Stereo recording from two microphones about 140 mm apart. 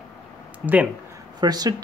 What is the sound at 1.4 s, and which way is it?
Speech, 30° right (ahead or behind).